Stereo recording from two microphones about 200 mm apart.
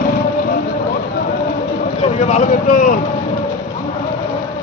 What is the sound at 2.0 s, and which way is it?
Vehicle, 35° left (ahead or behind).